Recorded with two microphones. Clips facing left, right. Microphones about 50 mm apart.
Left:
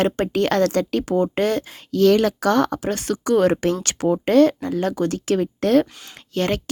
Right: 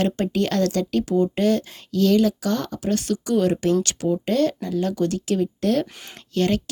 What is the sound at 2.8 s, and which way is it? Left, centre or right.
Speech, left.